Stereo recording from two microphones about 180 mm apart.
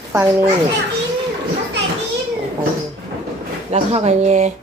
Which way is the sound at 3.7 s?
35° right (ahead or behind).